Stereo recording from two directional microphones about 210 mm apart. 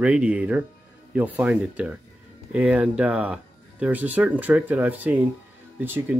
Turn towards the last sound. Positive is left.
turn(degrees=-10)  # may be behind; listen again after turning